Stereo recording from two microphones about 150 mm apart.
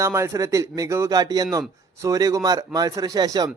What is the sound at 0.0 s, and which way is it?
Speech, 20° right (ahead or behind).